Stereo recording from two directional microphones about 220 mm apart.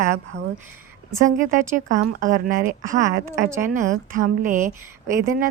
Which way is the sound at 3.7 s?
35° right (ahead or behind).